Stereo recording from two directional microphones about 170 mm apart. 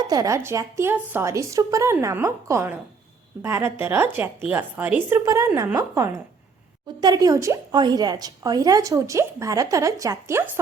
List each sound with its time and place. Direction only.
0.0 s a woman's voice: 20° right (ahead or behind)